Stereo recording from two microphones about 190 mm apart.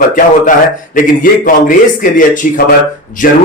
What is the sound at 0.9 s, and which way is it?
A man's voice, 45° left (ahead or behind).